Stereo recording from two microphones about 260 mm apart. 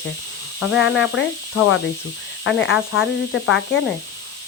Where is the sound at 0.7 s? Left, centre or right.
Left.